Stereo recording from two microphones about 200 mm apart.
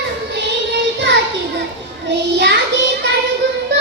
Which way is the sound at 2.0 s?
60° right (ahead or behind).